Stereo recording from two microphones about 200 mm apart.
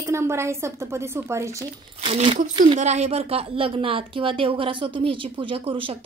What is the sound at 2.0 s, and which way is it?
A woman's voice, 30° right (ahead or behind).